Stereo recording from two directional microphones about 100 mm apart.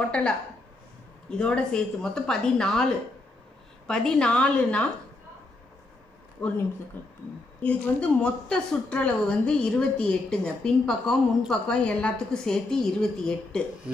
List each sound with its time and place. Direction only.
0.1 s a woman's voice: 10° left (ahead or behind)
6.4 s speech: 5° left (ahead or behind)
7.0 s a woman's voice: 20° left (ahead or behind)